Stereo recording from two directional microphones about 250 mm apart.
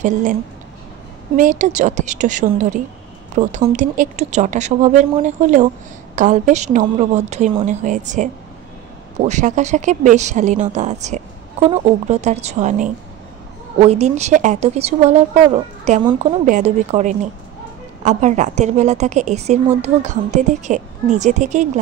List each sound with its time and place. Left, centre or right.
0.0 s speech: right